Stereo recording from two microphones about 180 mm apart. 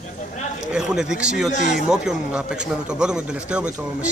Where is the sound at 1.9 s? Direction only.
5° right (ahead or behind).